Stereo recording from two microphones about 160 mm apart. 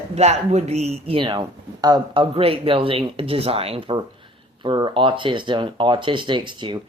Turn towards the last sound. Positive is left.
turn(degrees=-30)  # may be behind; listen again after turning